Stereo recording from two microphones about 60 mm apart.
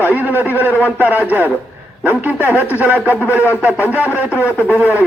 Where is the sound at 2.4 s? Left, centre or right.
Left.